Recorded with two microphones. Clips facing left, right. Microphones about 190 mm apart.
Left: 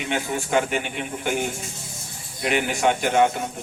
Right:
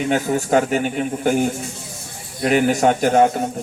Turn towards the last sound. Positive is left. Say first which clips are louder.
# right 5 dB
turn(degrees=-40)  # may be behind; listen again after turning